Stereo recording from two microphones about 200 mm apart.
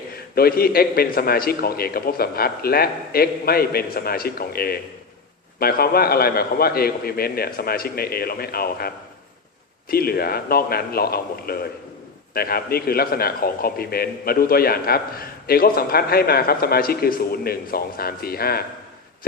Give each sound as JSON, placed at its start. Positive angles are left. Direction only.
{"t": 0.3, "sound": "a man's voice", "side_deg": 50}
{"t": 9.9, "sound": "a man's voice", "side_deg": 50}